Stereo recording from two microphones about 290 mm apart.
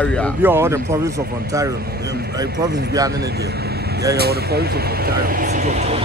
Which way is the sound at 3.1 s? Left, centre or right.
Right.